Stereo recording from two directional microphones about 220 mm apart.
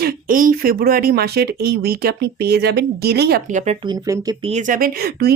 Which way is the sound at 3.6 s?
30° right (ahead or behind).